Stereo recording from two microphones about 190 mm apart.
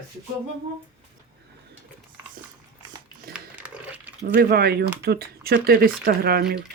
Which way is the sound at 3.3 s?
5° right (ahead or behind).